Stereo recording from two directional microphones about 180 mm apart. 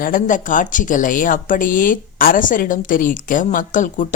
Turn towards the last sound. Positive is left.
turn(degrees=45)  # may be behind; listen again after turning